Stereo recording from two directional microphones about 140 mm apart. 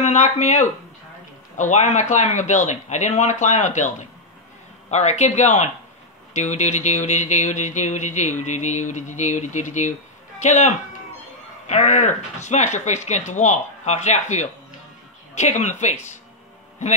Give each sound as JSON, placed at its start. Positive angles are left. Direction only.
{"t": 0.0, "sound": "speech", "side_deg": 55}